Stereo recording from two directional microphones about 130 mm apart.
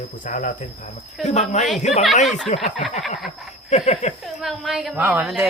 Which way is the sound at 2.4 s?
55° left (ahead or behind).